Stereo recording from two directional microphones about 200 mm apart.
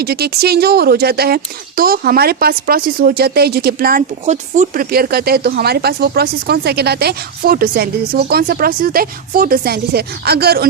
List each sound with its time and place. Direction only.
0.0 s speech: 50° right (ahead or behind)